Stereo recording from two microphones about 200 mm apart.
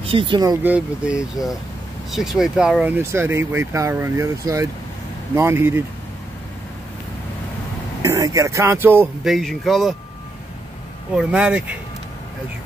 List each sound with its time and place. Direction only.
0.0 s speech: 25° right (ahead or behind)
0.7 s speech: 5° right (ahead or behind)
8.0 s speech: 15° right (ahead or behind)
9.3 s speech: centre (ahead or behind)
11.1 s speech: 5° right (ahead or behind)